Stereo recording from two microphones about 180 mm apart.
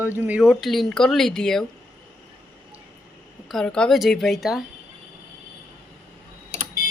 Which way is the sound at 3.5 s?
5° left (ahead or behind).